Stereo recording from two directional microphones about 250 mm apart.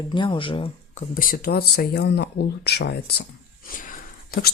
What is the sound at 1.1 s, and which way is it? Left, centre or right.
Speech, left.